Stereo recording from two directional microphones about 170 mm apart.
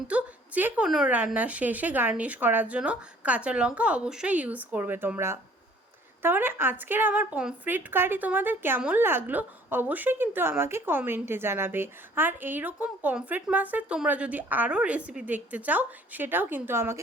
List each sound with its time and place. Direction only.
0.1 s a woman's voice: 10° right (ahead or behind)